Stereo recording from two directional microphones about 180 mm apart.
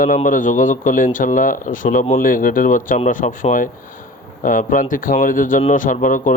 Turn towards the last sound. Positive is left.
turn(degrees=45)  # may be behind; listen again after turning